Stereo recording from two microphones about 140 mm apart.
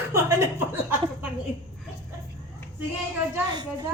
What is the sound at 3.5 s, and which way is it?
Speech, 30° right (ahead or behind).